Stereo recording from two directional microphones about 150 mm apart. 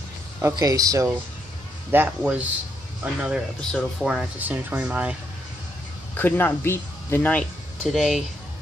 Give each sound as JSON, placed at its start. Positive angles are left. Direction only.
{"t": 0.4, "sound": "a man's voice", "side_deg": -20}
{"t": 1.9, "sound": "speech", "side_deg": -10}
{"t": 6.1, "sound": "speech", "side_deg": 15}
{"t": 7.9, "sound": "speech", "side_deg": 0}